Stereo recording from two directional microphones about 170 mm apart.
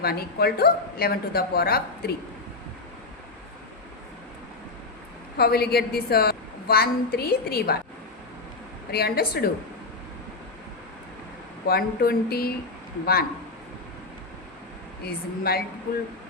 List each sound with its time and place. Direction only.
0.0 s a woman's voice: 65° left (ahead or behind)
5.4 s a woman's voice: 65° left (ahead or behind)
8.9 s a woman's voice: 65° left (ahead or behind)
11.6 s a woman's voice: 65° left (ahead or behind)
15.0 s a woman's voice: 65° left (ahead or behind)